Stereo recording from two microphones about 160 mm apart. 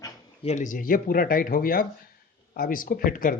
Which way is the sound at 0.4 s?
50° left (ahead or behind).